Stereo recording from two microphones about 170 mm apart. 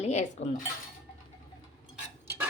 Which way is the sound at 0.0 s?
45° left (ahead or behind).